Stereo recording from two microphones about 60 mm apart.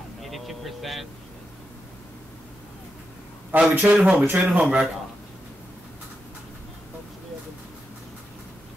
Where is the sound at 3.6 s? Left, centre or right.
Right.